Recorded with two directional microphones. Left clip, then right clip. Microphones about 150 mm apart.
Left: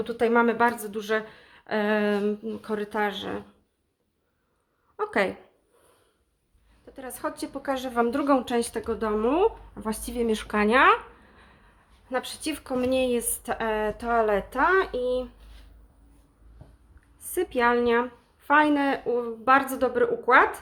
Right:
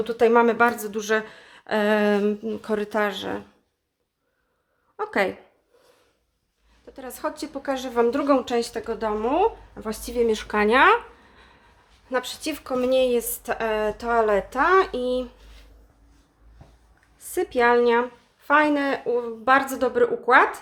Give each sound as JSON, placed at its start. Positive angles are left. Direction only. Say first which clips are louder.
{"t": 0.0, "sound": "a woman's voice", "louder": "right 4 dB", "side_deg": -15}
{"t": 4.9, "sound": "a woman's voice", "louder": "right 2 dB", "side_deg": 0}
{"t": 6.8, "sound": "a woman's voice", "louder": "right 3 dB", "side_deg": -5}
{"t": 14.6, "sound": "a woman's voice", "louder": "right 3 dB", "side_deg": -20}
{"t": 17.3, "sound": "a woman's voice", "louder": "right 4 dB", "side_deg": -10}